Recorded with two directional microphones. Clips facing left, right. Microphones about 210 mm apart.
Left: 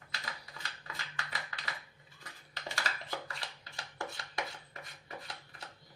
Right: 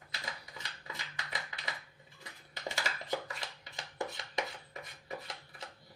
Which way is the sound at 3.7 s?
20° right (ahead or behind).